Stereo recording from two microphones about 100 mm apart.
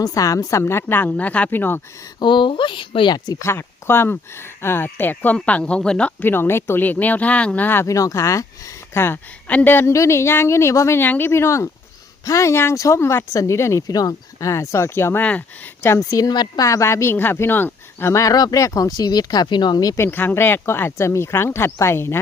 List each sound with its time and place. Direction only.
0.0 s speech: 35° left (ahead or behind)
2.1 s speech: 50° left (ahead or behind)
3.2 s speech: 25° left (ahead or behind)
7.9 s speech: 35° left (ahead or behind)
15.2 s speech: 15° left (ahead or behind)
16.0 s speech: 40° left (ahead or behind)
16.6 s speech: 30° left (ahead or behind)
20.0 s speech: 20° left (ahead or behind)